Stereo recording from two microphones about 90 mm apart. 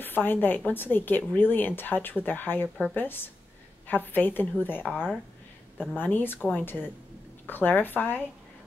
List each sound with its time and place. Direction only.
0.0 s a woman's voice: 20° left (ahead or behind)